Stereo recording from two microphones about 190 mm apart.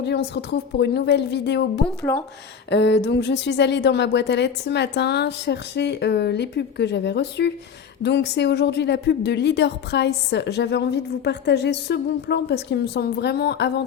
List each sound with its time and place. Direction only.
0.0 s a woman's voice: 65° left (ahead or behind)
2.1 s speech: 15° left (ahead or behind)
2.6 s a woman's voice: 65° left (ahead or behind)